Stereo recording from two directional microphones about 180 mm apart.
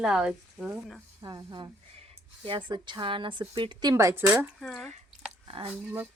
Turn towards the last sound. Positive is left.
turn(degrees=-10)  # may be behind; listen again after turning